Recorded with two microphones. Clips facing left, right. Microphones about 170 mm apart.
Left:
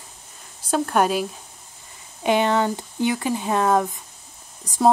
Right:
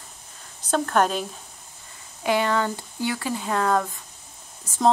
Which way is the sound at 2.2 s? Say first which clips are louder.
Left 3 dB; 20° left (ahead or behind).